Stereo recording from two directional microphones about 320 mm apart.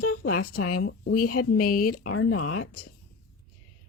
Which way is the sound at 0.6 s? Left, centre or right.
Left.